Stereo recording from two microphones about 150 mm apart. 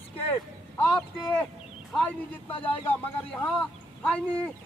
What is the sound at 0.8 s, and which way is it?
Speech, 10° left (ahead or behind).